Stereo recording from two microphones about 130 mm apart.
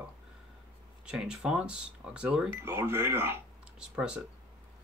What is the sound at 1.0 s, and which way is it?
Speech, 5° right (ahead or behind).